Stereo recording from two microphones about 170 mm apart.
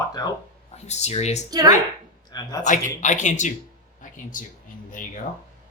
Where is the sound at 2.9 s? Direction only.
45° left (ahead or behind).